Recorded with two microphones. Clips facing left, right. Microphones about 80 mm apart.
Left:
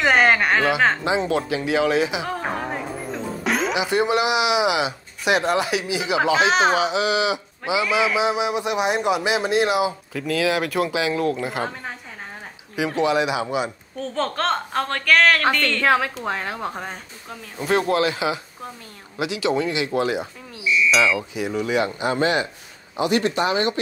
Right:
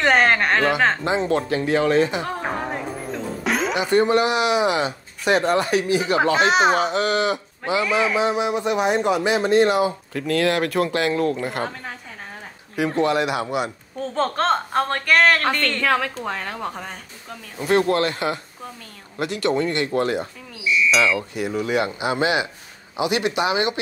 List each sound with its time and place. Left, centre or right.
0.0 s speech: centre
2.3 s music: centre
6.3 s a man's voice: centre
12.7 s speech: centre
14.1 s speech: right
14.5 s speech: centre
15.0 s speech: centre
16.3 s speech: centre
17.6 s speech: centre